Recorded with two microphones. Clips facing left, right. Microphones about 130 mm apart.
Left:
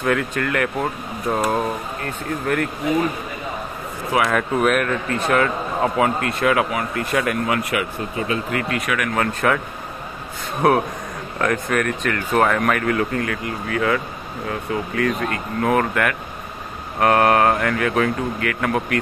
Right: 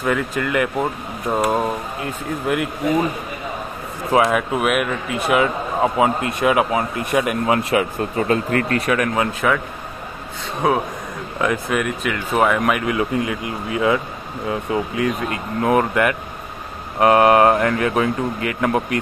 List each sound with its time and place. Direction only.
0.0 s speech: 5° right (ahead or behind)
4.3 s speech: 10° right (ahead or behind); by 7.8 s 25° right (ahead or behind)
8.3 s speech: 45° right (ahead or behind)
8.8 s speech: 30° right (ahead or behind)
9.4 s a man's voice: centre (ahead or behind)
11.4 s speech: 10° right (ahead or behind)